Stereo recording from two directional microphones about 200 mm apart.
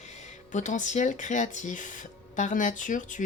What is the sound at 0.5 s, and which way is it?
Speech, 40° left (ahead or behind).